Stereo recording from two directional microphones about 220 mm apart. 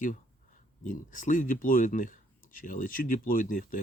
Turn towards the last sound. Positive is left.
turn(degrees=40)  # may be behind; listen again after turning